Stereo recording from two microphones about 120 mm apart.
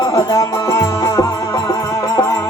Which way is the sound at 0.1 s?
30° left (ahead or behind).